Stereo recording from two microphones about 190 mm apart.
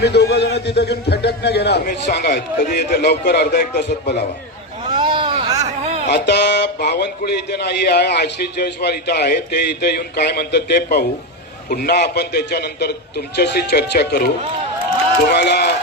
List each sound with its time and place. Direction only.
0.0 s a man's voice: 60° left (ahead or behind)
4.9 s a sound: 25° right (ahead or behind)
6.1 s a man's voice: 60° left (ahead or behind)
15.3 s a man's voice: 60° left (ahead or behind)